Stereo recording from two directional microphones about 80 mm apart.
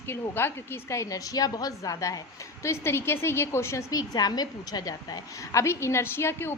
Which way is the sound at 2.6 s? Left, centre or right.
Left.